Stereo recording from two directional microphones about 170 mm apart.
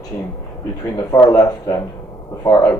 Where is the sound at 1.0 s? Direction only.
20° left (ahead or behind).